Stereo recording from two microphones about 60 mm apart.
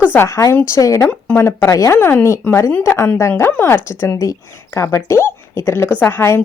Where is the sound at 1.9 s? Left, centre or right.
Left.